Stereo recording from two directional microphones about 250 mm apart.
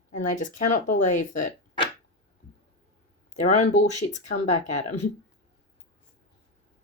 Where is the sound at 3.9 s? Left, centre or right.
Left.